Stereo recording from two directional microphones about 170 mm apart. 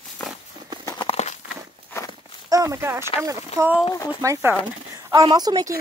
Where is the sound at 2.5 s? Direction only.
20° right (ahead or behind).